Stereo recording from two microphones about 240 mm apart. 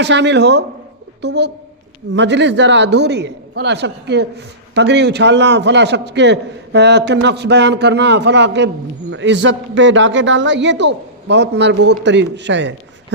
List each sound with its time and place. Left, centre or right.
0.0 s a man's voice: right